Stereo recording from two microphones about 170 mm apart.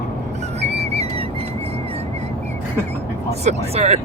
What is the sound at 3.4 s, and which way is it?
Speech, 40° right (ahead or behind).